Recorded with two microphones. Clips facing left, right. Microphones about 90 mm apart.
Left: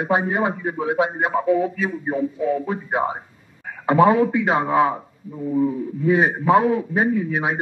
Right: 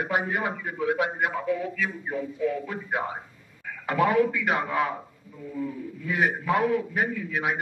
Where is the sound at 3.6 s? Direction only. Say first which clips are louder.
Left 9 dB; 35° left (ahead or behind).